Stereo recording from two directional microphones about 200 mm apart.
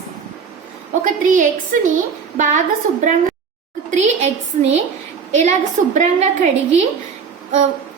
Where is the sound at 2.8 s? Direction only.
40° right (ahead or behind).